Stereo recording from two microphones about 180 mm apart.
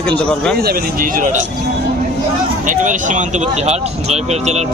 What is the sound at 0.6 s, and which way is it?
Speech, 50° right (ahead or behind).